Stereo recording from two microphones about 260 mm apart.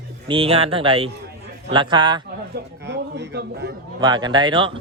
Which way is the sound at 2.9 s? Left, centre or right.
Right.